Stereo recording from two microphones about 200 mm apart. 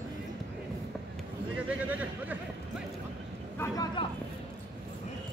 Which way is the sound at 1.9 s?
10° right (ahead or behind).